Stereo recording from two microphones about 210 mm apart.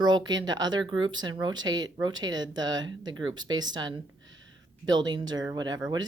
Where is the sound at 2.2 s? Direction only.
65° right (ahead or behind).